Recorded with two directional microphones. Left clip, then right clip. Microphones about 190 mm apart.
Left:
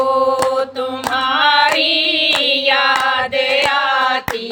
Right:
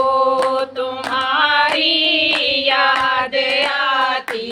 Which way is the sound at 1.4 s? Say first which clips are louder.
Left 2 dB; 40° left (ahead or behind).